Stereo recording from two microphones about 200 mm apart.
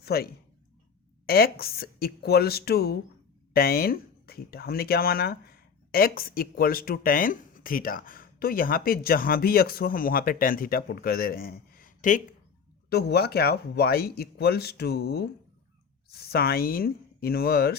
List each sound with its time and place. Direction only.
0.0 s speech: 50° left (ahead or behind)
1.3 s speech: 50° left (ahead or behind)
12.9 s speech: 55° left (ahead or behind)